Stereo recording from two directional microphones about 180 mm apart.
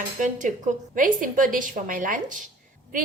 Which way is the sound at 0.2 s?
45° right (ahead or behind).